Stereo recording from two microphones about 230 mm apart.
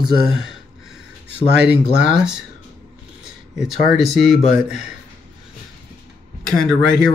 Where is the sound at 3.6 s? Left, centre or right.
Centre.